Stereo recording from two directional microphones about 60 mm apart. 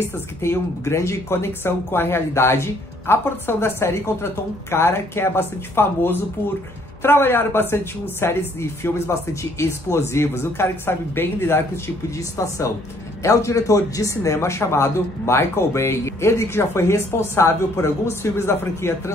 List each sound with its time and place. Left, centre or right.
0.4 s speech: left
12.2 s speech: left